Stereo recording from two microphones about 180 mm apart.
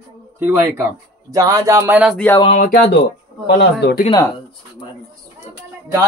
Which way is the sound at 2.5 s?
45° left (ahead or behind).